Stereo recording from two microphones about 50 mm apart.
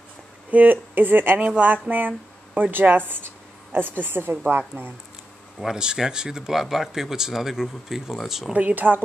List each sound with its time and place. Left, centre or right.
0.5 s speech: right
5.8 s speech: centre
8.5 s speech: right